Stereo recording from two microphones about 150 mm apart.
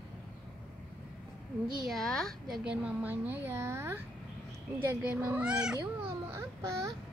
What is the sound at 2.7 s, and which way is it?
A woman's voice, 10° right (ahead or behind).